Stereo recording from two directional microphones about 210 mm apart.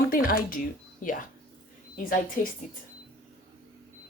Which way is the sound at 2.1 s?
40° left (ahead or behind).